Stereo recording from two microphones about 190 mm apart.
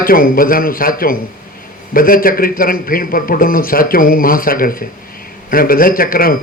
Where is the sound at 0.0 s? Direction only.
50° left (ahead or behind).